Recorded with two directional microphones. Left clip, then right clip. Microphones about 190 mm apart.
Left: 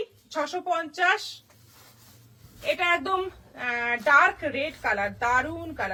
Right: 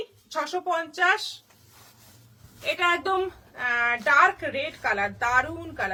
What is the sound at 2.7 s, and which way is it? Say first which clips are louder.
A woman's voice: right 1 dB; 25° right (ahead or behind).